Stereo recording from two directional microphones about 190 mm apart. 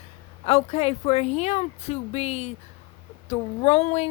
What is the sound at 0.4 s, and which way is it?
Speech, 35° left (ahead or behind).